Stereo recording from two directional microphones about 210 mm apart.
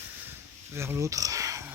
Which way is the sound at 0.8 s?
10° right (ahead or behind).